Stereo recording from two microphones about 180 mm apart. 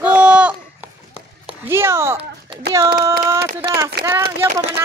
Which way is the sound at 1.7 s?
15° right (ahead or behind).